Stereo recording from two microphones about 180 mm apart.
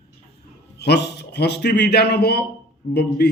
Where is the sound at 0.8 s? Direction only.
65° left (ahead or behind).